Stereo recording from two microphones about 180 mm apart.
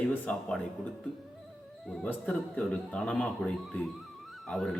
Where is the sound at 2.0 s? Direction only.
5° left (ahead or behind).